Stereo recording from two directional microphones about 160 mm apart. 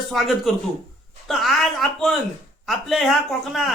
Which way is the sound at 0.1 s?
Centre (ahead or behind).